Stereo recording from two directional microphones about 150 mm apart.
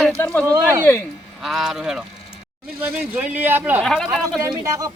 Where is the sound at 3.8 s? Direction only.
Centre (ahead or behind).